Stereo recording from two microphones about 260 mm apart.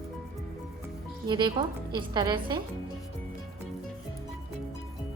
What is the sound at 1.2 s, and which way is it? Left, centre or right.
A woman's voice, centre.